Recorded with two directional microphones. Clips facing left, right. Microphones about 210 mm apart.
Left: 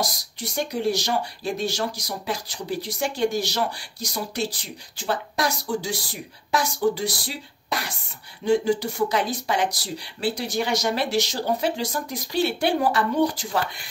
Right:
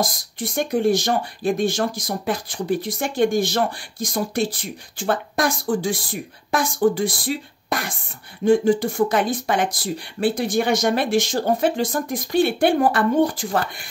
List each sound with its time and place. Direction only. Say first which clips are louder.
0.0 s speech: right 4 dB; 50° right (ahead or behind)